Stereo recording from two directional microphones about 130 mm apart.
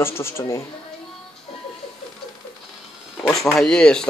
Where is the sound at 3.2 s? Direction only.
5° left (ahead or behind).